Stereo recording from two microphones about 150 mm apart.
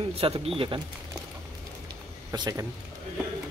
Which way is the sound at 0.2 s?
40° right (ahead or behind).